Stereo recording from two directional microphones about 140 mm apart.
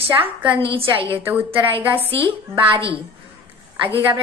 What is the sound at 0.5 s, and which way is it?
Speech, 40° right (ahead or behind).